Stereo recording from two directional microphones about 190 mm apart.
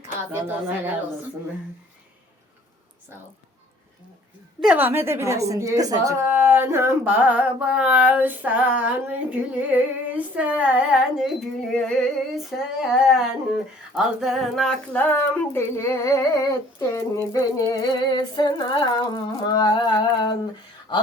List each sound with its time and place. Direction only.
0.0 s a woman's voice: 10° right (ahead or behind)
4.6 s a woman's voice: 10° right (ahead or behind)
9.3 s humming: 10° right (ahead or behind)
13.9 s speech: centre (ahead or behind); by 17.1 s 15° left (ahead or behind)
17.7 s a sound: 20° left (ahead or behind)
20.9 s speech: 25° left (ahead or behind)